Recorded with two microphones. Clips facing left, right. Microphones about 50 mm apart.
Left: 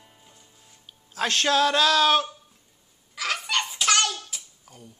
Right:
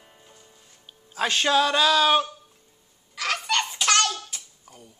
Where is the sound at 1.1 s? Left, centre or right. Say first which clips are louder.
Right 1 dB; centre.